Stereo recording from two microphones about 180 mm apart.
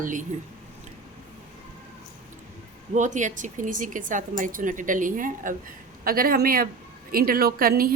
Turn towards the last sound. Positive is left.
turn(degrees=-55)  # may be behind; listen again after turning